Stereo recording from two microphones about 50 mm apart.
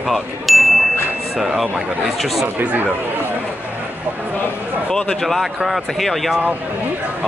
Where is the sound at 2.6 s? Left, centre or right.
Right.